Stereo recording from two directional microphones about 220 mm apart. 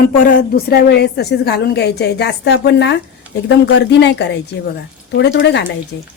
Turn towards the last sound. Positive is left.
turn(degrees=50)  # may be behind; listen again after turning